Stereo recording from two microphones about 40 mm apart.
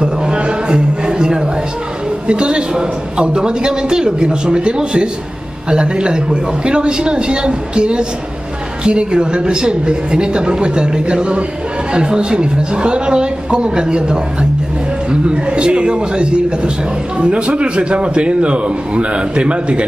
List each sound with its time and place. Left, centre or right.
0.0 s music: right
2.2 s a man's voice: right